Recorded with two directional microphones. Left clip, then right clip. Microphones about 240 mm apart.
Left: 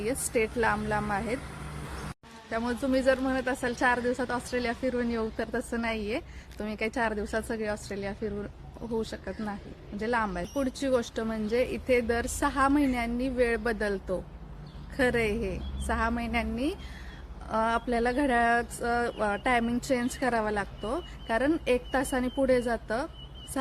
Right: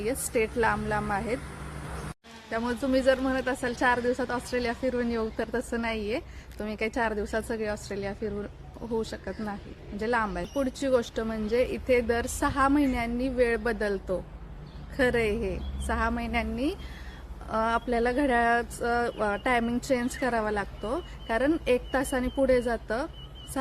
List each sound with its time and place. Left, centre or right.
0.0 s a woman's voice: centre
1.4 s vehicle: left
2.5 s a woman's voice: centre